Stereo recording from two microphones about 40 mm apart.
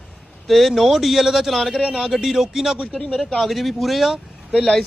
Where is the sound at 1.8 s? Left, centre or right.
Right.